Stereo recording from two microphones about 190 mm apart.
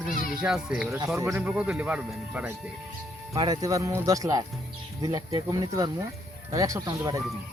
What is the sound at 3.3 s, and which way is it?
Speech, 20° right (ahead or behind).